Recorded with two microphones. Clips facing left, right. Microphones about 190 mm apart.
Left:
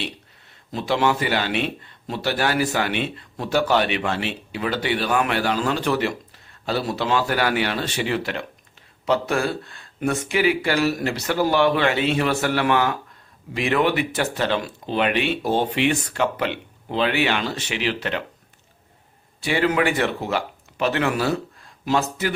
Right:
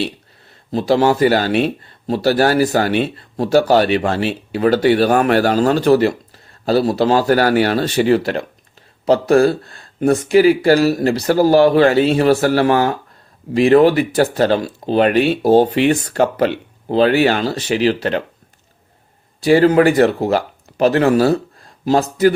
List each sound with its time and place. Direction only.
0.7 s speech: 35° right (ahead or behind)
19.4 s speech: 40° right (ahead or behind)